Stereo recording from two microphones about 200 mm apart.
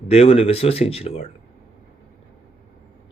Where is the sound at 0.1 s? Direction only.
30° left (ahead or behind).